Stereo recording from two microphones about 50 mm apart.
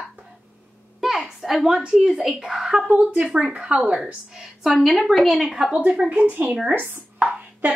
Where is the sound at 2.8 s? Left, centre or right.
Right.